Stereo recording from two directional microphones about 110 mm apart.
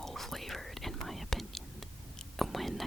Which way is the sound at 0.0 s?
Centre (ahead or behind).